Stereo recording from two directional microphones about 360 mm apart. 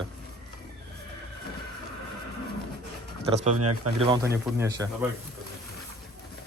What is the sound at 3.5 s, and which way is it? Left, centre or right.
Speech, right.